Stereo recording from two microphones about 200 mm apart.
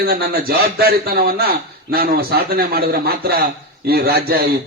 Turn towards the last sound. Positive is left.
turn(degrees=-50)  # may be behind; listen again after turning